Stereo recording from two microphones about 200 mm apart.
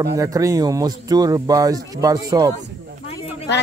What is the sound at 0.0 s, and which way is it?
Speech, 15° right (ahead or behind).